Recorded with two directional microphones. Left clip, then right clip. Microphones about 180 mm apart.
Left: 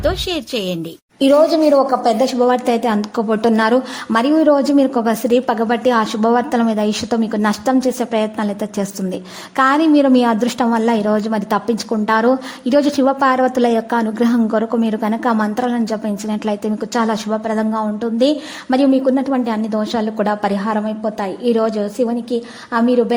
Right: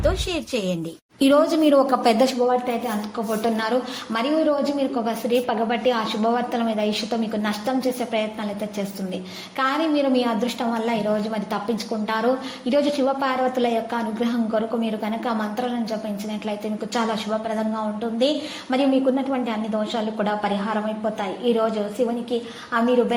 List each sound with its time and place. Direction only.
0.0 s a woman's voice: 30° left (ahead or behind)
1.2 s a woman's voice: 15° left (ahead or behind)
2.6 s a woman's voice: 60° left (ahead or behind); by 22.1 s 40° left (ahead or behind)